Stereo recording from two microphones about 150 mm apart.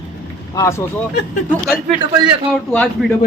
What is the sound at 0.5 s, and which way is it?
Speech, 20° left (ahead or behind).